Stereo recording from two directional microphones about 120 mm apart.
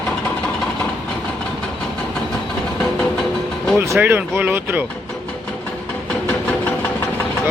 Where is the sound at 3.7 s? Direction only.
20° right (ahead or behind).